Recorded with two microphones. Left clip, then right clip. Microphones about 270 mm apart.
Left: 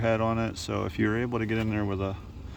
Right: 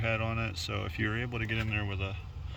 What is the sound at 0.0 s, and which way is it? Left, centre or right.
Speech, centre.